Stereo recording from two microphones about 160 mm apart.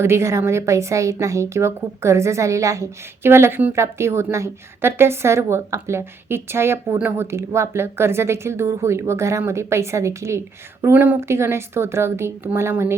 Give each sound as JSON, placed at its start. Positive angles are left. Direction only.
{"t": 0.0, "sound": "a woman's voice", "side_deg": -15}